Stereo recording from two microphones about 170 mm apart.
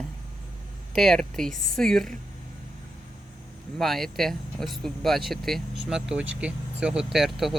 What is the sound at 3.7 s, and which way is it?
Speech, centre (ahead or behind).